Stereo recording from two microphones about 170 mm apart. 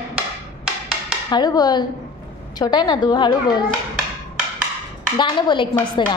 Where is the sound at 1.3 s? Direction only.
25° left (ahead or behind).